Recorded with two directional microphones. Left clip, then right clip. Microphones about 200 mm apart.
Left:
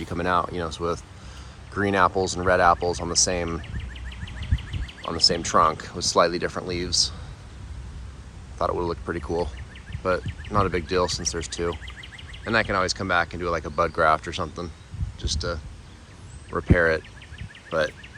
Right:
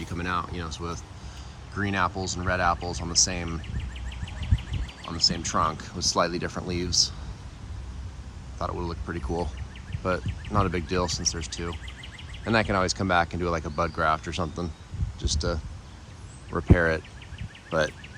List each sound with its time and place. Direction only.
0.0 s speech: 5° right (ahead or behind)
4.3 s a sound: 35° right (ahead or behind)
5.0 s speech: 5° right (ahead or behind)
8.5 s speech: 10° right (ahead or behind)
12.5 s speech: 25° right (ahead or behind)